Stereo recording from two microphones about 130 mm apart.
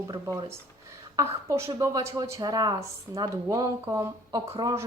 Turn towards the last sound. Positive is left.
turn(degrees=-25)  # may be behind; listen again after turning